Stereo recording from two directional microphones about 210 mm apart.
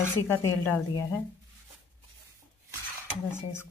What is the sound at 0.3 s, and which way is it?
Speech, 10° left (ahead or behind).